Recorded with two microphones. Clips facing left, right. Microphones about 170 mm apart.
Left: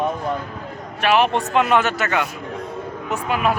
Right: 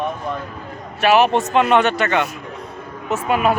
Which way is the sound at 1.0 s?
5° right (ahead or behind).